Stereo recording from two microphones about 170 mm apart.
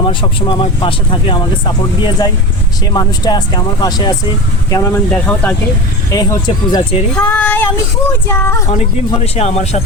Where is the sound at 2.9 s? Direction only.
25° left (ahead or behind).